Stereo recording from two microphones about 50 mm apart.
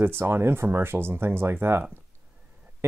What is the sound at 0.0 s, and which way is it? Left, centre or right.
Speech, right.